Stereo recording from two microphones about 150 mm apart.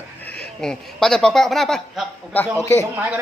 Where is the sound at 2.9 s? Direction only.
10° right (ahead or behind).